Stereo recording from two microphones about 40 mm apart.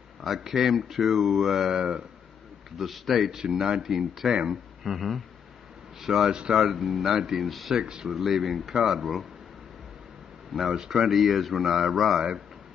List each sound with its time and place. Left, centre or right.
0.2 s speech: centre
1.8 s speech: right
2.8 s speech: centre
3.3 s speech: centre
4.8 s speech: centre
7.7 s speech: centre
8.1 s speech: centre
10.7 s speech: centre